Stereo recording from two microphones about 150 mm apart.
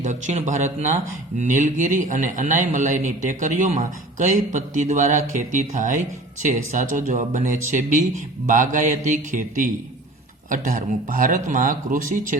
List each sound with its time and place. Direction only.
0.0 s speech: 55° right (ahead or behind)